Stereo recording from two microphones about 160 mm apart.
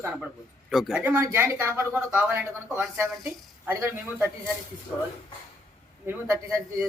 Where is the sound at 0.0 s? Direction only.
5° right (ahead or behind).